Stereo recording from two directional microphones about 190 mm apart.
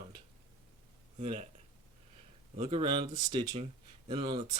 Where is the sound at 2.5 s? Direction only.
30° right (ahead or behind).